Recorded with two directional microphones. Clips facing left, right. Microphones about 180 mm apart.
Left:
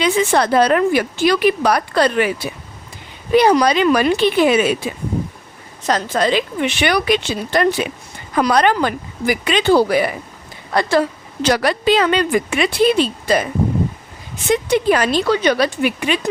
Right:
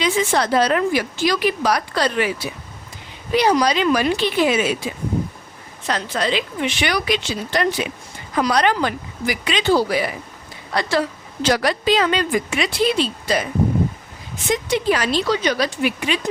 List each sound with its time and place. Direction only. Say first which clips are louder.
0.0 s speech: left 4 dB; 55° left (ahead or behind)
5.8 s a woman's voice: left 5 dB; 45° left (ahead or behind)
14.5 s speech: left 4 dB; 55° left (ahead or behind)